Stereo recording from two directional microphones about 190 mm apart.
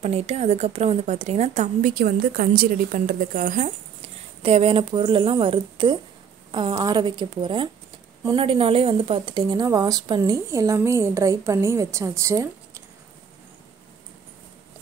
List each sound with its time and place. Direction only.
0.0 s a woman's voice: 35° right (ahead or behind)
4.4 s a woman's voice: 30° right (ahead or behind); by 12.8 s 15° right (ahead or behind)